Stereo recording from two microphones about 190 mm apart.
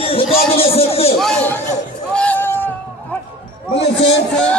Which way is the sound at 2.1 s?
10° left (ahead or behind).